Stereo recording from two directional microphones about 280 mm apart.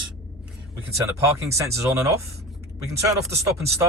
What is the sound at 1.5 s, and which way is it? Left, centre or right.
Speech, centre.